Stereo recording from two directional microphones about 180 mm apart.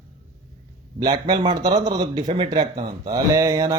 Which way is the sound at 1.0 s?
25° right (ahead or behind).